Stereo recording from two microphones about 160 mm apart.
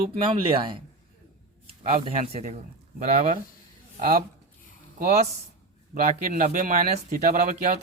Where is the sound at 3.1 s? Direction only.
55° right (ahead or behind).